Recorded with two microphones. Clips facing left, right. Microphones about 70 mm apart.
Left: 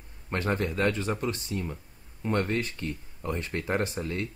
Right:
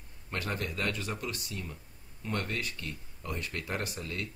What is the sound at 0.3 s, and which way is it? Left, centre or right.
Speech, left.